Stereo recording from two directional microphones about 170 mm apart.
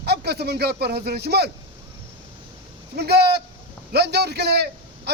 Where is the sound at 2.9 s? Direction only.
70° right (ahead or behind).